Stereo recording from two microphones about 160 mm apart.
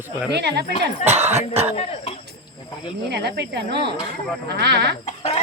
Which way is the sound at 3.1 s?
90° right.